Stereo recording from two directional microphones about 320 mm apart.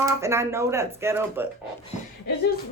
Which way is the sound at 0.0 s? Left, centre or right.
Centre.